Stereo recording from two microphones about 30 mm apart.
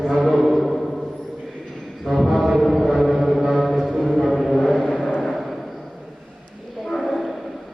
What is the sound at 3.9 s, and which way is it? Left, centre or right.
Music, centre.